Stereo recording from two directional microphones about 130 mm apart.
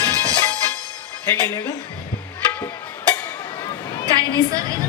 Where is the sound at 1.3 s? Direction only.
20° left (ahead or behind).